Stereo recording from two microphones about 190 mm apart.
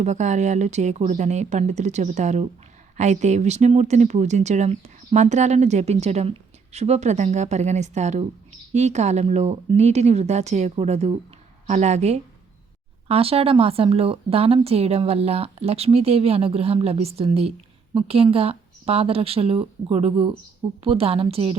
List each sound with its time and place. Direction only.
0.0 s speech: 40° right (ahead or behind)